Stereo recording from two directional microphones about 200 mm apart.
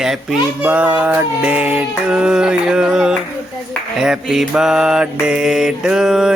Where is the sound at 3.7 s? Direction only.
5° right (ahead or behind).